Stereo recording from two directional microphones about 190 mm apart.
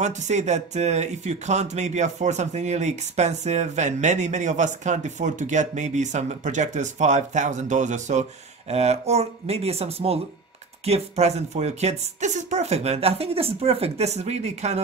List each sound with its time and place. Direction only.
0.0 s speech: 40° right (ahead or behind)